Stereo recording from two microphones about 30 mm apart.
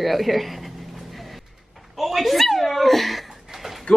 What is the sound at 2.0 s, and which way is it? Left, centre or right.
Dog, centre.